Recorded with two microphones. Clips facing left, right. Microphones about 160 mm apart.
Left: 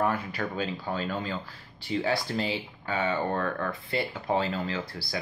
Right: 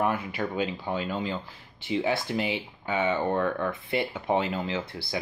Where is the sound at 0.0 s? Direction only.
20° right (ahead or behind).